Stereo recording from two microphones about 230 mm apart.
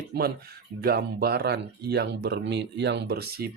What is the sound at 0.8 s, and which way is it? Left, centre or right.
Speech, right.